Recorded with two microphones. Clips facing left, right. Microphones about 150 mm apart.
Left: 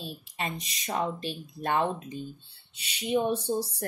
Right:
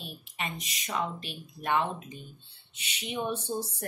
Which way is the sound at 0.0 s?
35° left (ahead or behind).